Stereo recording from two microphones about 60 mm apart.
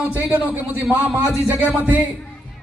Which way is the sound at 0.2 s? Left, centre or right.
Right.